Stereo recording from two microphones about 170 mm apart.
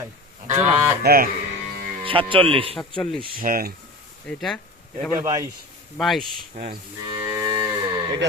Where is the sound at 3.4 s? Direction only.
55° right (ahead or behind).